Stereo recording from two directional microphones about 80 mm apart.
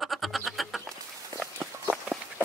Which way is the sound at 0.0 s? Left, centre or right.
Centre.